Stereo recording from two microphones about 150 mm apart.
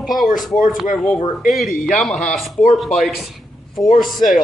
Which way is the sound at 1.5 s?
Centre (ahead or behind).